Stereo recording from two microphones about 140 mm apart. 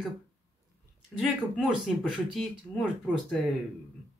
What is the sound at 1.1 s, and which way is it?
Speech, 5° right (ahead or behind).